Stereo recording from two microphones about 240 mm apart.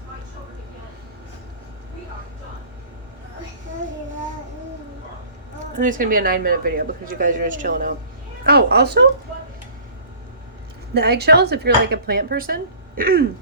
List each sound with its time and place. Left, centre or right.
5.8 s a woman's voice: right
10.9 s a woman's voice: right